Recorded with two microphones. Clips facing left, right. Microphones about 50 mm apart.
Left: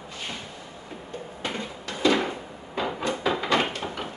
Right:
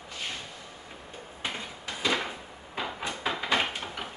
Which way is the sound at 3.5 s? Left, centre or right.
Centre.